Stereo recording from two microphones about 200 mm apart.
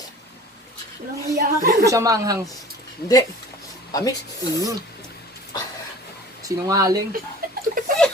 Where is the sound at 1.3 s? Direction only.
50° right (ahead or behind).